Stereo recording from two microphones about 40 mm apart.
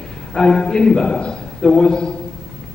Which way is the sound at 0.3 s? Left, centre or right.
Centre.